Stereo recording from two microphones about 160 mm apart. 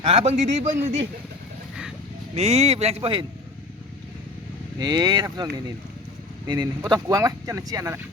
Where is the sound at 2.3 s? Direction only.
40° right (ahead or behind).